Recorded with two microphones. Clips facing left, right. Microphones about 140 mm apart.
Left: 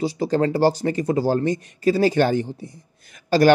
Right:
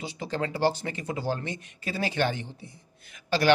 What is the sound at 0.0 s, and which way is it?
Speech, 35° left (ahead or behind).